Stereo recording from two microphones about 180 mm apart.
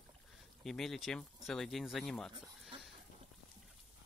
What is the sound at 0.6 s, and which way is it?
Speech, centre (ahead or behind).